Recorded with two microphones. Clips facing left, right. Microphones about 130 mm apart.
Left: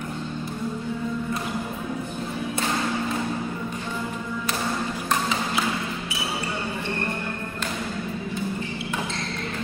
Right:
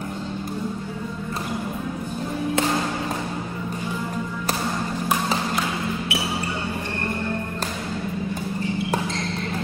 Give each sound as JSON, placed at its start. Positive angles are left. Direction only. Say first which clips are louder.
{"t": 6.1, "sound": "basketball bounce", "louder": "right 5 dB", "side_deg": -65}